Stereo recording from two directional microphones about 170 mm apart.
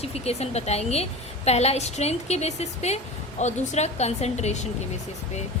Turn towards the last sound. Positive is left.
turn(degrees=40)  # may be behind; listen again after turning